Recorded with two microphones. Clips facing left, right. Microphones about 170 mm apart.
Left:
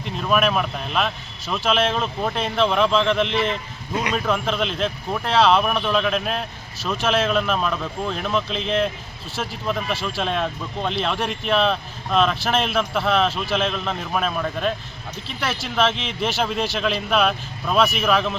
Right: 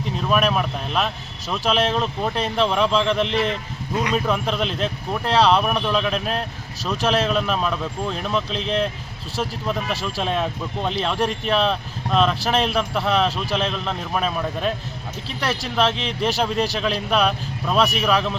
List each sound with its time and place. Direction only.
0.2 s speech: centre (ahead or behind)
9.9 s speech: 40° right (ahead or behind)
10.2 s speech: 5° right (ahead or behind)
15.7 s speech: centre (ahead or behind)